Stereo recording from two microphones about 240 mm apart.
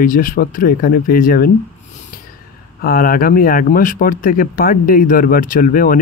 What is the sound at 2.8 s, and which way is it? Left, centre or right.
Speech, left.